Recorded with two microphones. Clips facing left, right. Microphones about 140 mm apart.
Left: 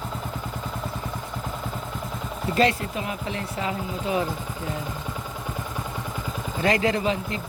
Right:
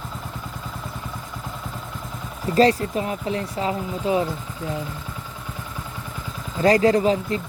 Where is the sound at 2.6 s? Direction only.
35° right (ahead or behind).